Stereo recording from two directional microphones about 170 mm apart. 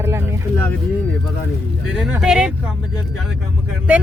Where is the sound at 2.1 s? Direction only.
5° right (ahead or behind).